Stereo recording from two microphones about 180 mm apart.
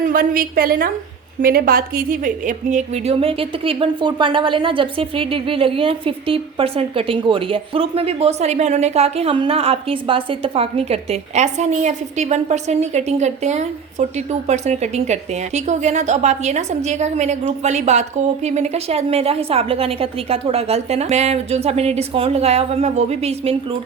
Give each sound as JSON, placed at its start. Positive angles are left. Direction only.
{"t": 0.1, "sound": "a woman's voice", "side_deg": -55}